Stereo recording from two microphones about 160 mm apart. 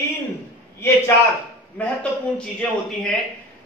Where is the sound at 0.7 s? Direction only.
15° left (ahead or behind).